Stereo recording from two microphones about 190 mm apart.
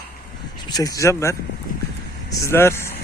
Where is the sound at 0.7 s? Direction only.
15° left (ahead or behind).